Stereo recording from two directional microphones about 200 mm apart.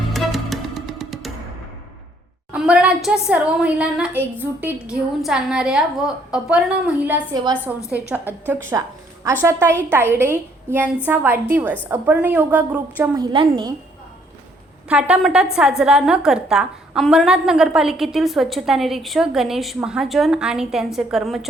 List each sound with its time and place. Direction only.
0.1 s music: centre (ahead or behind)
2.5 s a woman's voice: 5° right (ahead or behind); by 13.7 s 25° right (ahead or behind)
14.8 s a woman's voice: 5° right (ahead or behind)